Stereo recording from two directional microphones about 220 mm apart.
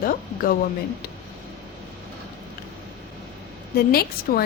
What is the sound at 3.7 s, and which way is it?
Speech, 45° left (ahead or behind).